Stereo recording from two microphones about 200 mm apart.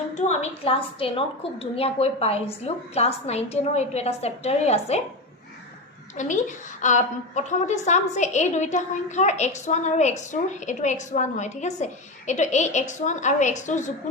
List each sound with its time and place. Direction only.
0.1 s a woman's voice: 35° left (ahead or behind)
6.1 s a woman's voice: 40° left (ahead or behind)